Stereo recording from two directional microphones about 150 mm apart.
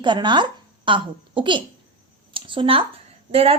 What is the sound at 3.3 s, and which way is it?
Speech, 40° right (ahead or behind).